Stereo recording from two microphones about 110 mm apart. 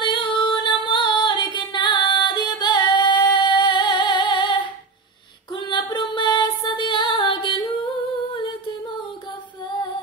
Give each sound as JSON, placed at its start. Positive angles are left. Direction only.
{"t": 0.0, "sound": "female singing", "side_deg": 45}